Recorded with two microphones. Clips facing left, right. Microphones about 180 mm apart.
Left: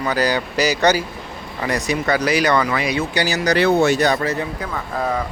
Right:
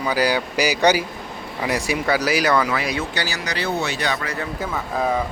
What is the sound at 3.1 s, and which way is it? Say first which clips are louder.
Speech: left 6 dB; 15° left (ahead or behind).